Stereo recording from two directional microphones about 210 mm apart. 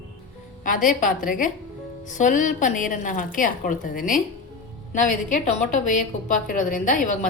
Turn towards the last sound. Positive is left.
turn(degrees=35)  # may be behind; listen again after turning